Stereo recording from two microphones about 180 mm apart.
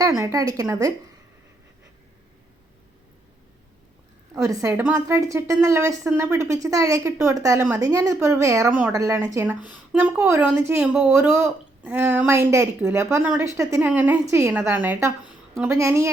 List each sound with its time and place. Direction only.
0.0 s a woman's voice: 20° right (ahead or behind)
4.4 s a woman's voice: 20° right (ahead or behind)